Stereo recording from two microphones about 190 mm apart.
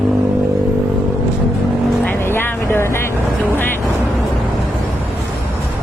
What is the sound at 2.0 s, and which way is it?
Vehicle, 10° left (ahead or behind).